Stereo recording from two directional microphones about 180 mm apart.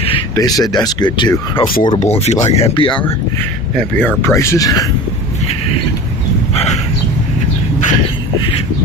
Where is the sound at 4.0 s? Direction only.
10° left (ahead or behind).